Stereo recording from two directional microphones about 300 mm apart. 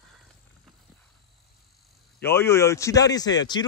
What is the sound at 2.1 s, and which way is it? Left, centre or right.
Speech, centre.